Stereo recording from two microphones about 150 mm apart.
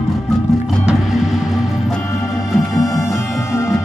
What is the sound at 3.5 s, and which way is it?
Music, 15° left (ahead or behind).